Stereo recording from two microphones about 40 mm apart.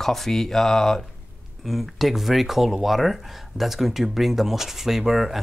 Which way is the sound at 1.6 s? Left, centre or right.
Centre.